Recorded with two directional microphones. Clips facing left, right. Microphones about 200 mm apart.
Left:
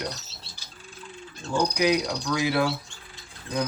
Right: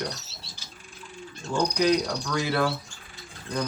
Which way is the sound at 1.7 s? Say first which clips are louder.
Right 2 dB; 10° left (ahead or behind).